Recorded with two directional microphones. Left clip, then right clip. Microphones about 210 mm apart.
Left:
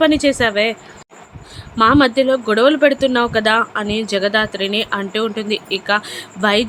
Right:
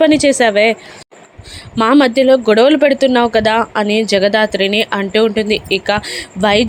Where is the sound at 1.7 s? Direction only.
20° right (ahead or behind).